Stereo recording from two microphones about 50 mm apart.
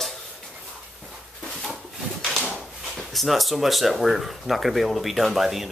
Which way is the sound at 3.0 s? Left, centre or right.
Centre.